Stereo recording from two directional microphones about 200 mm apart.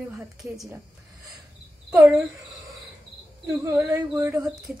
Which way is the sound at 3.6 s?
15° right (ahead or behind).